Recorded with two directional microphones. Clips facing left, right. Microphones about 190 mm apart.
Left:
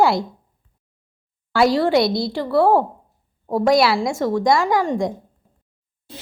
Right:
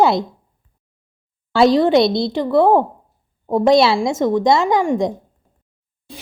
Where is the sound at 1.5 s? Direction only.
25° right (ahead or behind).